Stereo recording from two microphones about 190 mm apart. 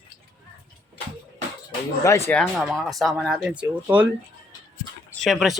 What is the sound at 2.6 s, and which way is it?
Speech, centre (ahead or behind).